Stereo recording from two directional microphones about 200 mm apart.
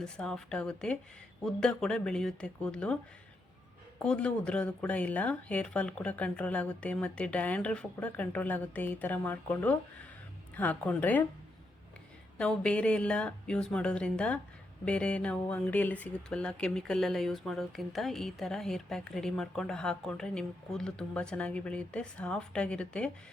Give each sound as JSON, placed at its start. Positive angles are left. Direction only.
{"t": 0.0, "sound": "speech", "side_deg": 5}
{"t": 4.0, "sound": "a woman's voice", "side_deg": 5}
{"t": 12.4, "sound": "speech", "side_deg": 5}